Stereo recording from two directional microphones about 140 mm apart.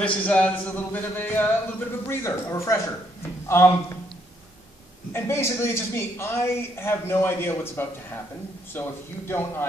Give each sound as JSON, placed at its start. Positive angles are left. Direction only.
{"t": 0.0, "sound": "a man's voice", "side_deg": 10}
{"t": 5.1, "sound": "speech", "side_deg": 20}
{"t": 9.3, "sound": "speech", "side_deg": 15}